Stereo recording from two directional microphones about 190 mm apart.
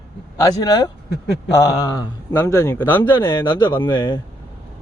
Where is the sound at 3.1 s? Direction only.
25° left (ahead or behind).